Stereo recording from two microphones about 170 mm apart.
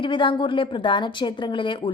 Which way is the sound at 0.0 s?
30° left (ahead or behind).